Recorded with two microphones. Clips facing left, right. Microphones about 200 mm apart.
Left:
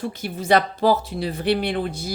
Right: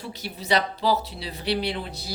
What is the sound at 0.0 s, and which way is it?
Speech, 50° left (ahead or behind).